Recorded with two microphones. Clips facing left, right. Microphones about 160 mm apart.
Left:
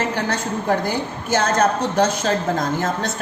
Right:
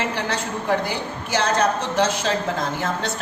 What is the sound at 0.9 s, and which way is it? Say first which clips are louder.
A woman's voice: left 4 dB; 45° left (ahead or behind).